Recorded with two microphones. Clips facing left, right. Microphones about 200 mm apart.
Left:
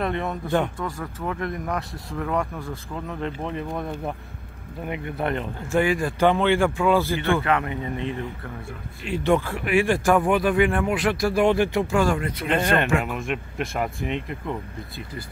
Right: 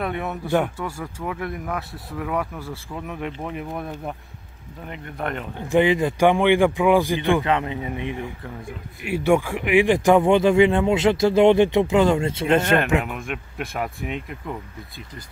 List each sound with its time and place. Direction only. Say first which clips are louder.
0.0 s speech: left 1 dB; 5° right (ahead or behind)
4.8 s speech: left 3 dB; 10° left (ahead or behind)
5.7 s speech: right 4 dB; 20° right (ahead or behind)
12.6 s speech: right 2 dB; centre (ahead or behind)